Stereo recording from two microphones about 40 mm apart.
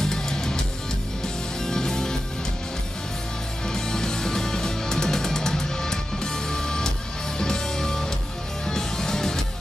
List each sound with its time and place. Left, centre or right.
0.0 s music: centre
1.6 s music: centre
3.6 s music: centre